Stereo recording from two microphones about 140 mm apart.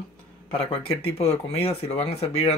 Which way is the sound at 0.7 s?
40° left (ahead or behind).